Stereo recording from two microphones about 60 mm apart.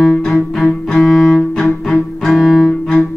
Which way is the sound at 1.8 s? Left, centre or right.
Centre.